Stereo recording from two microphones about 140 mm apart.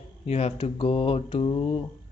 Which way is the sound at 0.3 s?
45° left (ahead or behind).